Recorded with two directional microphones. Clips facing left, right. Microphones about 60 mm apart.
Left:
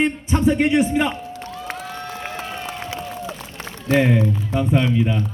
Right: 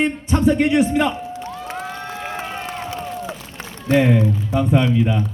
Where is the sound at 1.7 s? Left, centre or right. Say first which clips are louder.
Right 2 dB; centre.